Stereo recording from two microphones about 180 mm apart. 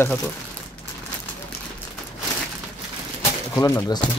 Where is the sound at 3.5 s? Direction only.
15° left (ahead or behind).